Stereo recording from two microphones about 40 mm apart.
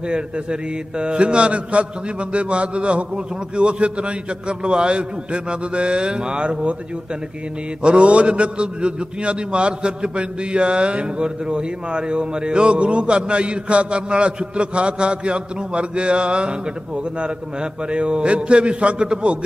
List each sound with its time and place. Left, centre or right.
0.1 s a man's voice: right
7.8 s a man's voice: right
17.9 s a man's voice: right